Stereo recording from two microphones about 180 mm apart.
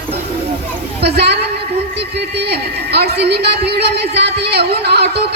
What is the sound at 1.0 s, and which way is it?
Speech, 65° right (ahead or behind).